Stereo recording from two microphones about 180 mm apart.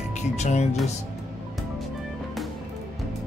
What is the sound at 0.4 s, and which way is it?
Speech, 40° left (ahead or behind).